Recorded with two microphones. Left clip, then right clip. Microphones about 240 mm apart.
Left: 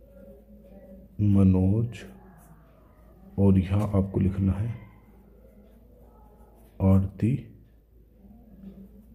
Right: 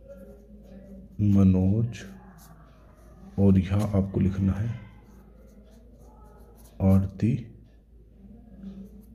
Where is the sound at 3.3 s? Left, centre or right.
Centre.